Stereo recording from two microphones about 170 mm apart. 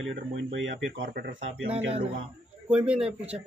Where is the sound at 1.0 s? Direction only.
55° right (ahead or behind).